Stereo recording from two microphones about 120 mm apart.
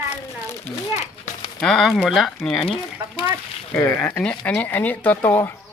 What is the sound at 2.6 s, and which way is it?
Speech, 45° left (ahead or behind).